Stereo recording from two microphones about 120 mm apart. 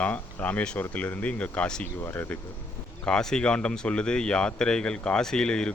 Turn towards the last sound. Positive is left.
turn(degrees=5)  # may be behind; listen again after turning